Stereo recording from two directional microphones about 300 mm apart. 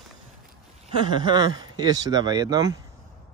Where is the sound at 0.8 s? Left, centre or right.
Centre.